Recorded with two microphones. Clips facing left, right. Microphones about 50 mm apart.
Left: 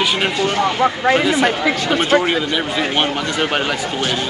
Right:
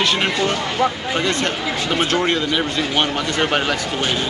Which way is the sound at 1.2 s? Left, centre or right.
Centre.